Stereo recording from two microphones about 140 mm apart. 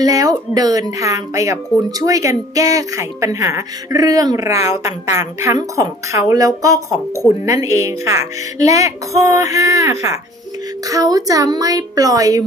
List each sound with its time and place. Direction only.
0.0 s speech: 25° right (ahead or behind)